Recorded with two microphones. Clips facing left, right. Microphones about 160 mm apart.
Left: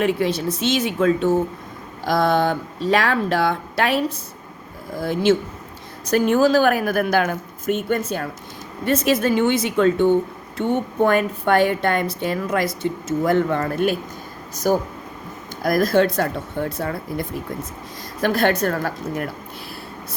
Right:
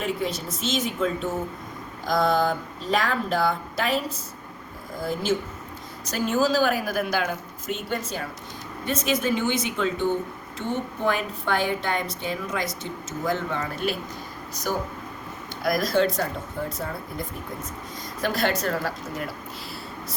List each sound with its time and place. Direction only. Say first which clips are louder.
0.0 s speech: left 7 dB; 65° left (ahead or behind)
2.0 s speech: left 4 dB; 65° left (ahead or behind)
5.0 s speech: left 7 dB; 85° left
6.1 s a woman's voice: left 7 dB; 55° left (ahead or behind)
18.2 s a woman's voice: left 6 dB; 55° left (ahead or behind)